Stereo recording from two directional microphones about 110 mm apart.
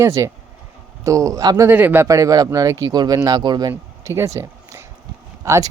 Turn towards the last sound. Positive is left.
turn(degrees=-25)  # may be behind; listen again after turning